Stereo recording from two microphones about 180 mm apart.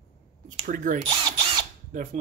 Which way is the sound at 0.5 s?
45° right (ahead or behind).